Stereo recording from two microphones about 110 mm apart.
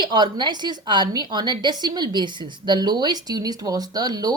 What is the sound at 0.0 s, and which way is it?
A woman's voice, 40° right (ahead or behind).